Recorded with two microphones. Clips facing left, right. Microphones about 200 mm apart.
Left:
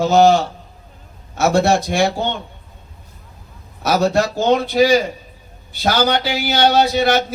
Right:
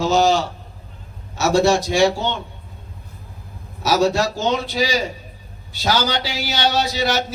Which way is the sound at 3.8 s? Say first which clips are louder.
Left 1 dB; 55° left (ahead or behind).